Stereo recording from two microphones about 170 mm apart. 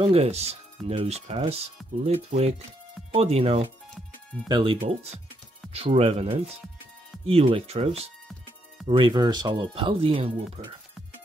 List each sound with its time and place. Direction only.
0.0 s speech: 35° right (ahead or behind)